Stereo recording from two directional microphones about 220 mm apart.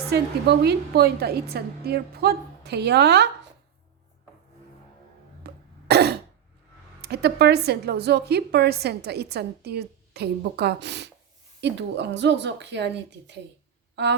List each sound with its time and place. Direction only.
0.1 s a woman's voice: 50° right (ahead or behind)
5.5 s cough: 45° right (ahead or behind)
7.0 s a woman's voice: 50° right (ahead or behind)
13.9 s a sound: 50° right (ahead or behind)